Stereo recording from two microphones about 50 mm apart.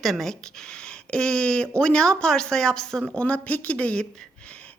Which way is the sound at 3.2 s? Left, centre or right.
Left.